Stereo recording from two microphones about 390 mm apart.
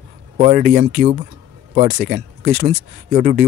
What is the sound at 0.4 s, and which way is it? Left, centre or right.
Speech, right.